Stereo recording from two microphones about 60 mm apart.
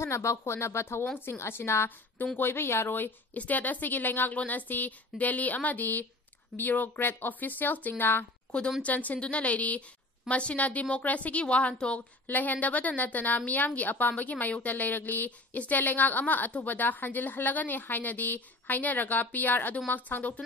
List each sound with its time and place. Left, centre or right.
0.0 s a woman's voice: left
8.5 s a woman's voice: centre
8.8 s a woman's voice: left